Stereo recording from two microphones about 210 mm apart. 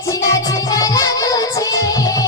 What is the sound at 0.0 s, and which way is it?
Music, 15° left (ahead or behind).